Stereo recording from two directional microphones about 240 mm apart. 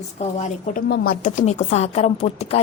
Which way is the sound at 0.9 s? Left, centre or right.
Left.